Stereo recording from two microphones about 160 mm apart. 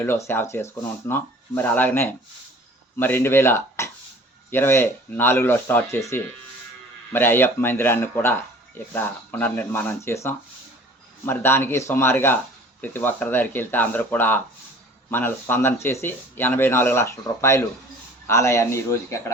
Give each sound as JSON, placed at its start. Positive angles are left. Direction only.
{"t": 0.0, "sound": "speech", "side_deg": 15}